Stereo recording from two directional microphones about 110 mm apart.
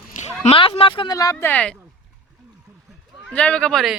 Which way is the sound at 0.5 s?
55° left (ahead or behind).